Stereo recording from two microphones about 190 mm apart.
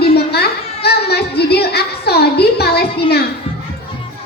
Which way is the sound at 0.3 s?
55° left (ahead or behind).